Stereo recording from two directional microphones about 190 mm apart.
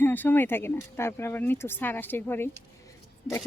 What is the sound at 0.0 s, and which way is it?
Speech, 10° left (ahead or behind).